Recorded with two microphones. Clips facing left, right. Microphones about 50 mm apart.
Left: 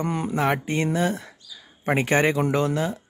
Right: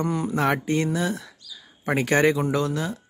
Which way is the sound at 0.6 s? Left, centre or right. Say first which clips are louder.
Even; left.